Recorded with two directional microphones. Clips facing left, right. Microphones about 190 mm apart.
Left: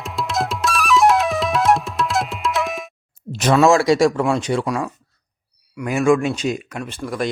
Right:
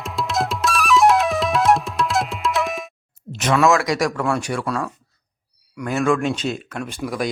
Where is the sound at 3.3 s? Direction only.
35° left (ahead or behind).